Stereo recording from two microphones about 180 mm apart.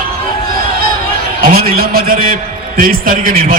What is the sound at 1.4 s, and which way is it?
A man's voice, 55° right (ahead or behind).